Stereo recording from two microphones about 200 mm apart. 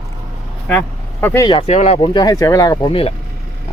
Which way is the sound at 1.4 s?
25° left (ahead or behind).